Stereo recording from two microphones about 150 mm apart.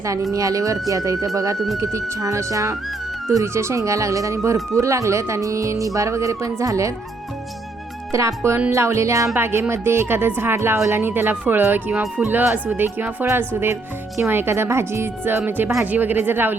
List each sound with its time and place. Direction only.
0.0 s speech: 20° right (ahead or behind)
1.5 s speech: centre (ahead or behind)
1.8 s speech: 20° right (ahead or behind)
8.4 s speech: 15° right (ahead or behind)